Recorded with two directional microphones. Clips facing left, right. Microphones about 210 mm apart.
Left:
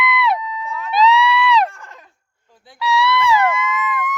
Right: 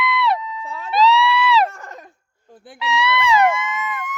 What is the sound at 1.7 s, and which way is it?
Goat, 40° right (ahead or behind).